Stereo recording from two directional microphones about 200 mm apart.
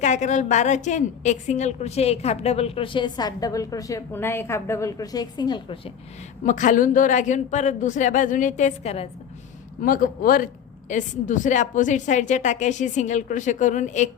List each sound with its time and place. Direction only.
0.0 s a woman's voice: 35° left (ahead or behind)
6.4 s a woman's voice: 40° left (ahead or behind)
9.8 s a woman's voice: 45° left (ahead or behind)